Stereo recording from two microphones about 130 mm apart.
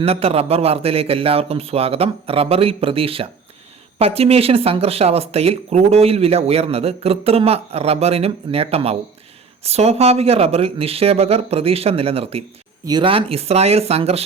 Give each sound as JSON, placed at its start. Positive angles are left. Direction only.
{"t": 0.0, "sound": "speech", "side_deg": -50}
{"t": 12.8, "sound": "speech", "side_deg": -35}